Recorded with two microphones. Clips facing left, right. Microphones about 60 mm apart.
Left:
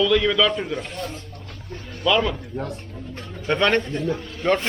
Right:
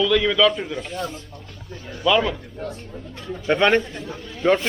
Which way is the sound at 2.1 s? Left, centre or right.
Centre.